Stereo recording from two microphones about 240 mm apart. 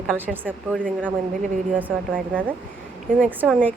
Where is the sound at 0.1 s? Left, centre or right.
Centre.